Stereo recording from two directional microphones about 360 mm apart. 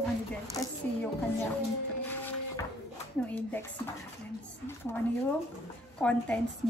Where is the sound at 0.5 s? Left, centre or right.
Centre.